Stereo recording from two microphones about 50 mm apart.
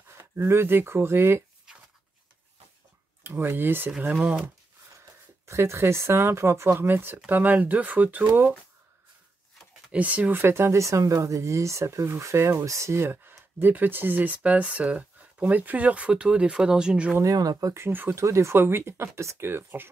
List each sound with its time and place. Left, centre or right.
0.2 s speech: right
3.3 s speech: right
4.1 s speech: right
5.5 s speech: right
7.2 s speech: right
9.8 s speech: right
10.3 s speech: right
13.0 s speech: right; by 17.1 s centre
18.1 s speech: right
18.5 s speech: right
19.4 s speech: right